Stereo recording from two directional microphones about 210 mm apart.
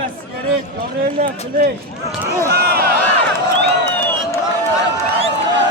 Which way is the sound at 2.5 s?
50° right (ahead or behind).